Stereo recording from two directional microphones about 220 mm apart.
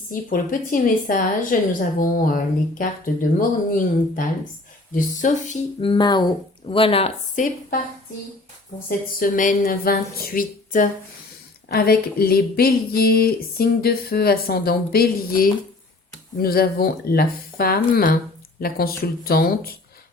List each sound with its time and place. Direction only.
0.1 s speech: 40° left (ahead or behind)
9.1 s speech: 40° left (ahead or behind)